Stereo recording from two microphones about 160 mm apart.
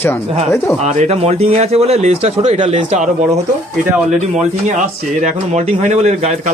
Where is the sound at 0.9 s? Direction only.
45° right (ahead or behind).